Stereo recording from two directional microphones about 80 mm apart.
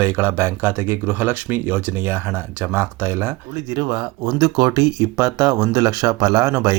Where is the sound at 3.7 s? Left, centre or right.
Right.